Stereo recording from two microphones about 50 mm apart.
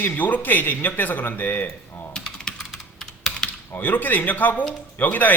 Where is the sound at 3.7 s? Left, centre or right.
Left.